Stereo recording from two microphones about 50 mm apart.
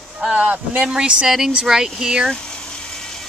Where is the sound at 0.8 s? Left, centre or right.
Centre.